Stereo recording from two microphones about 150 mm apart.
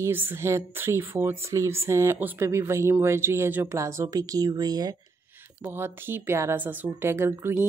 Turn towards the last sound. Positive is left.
turn(degrees=-15)  # may be behind; listen again after turning